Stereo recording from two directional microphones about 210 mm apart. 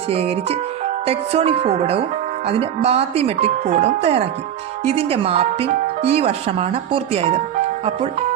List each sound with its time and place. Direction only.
0.1 s speech: 30° right (ahead or behind)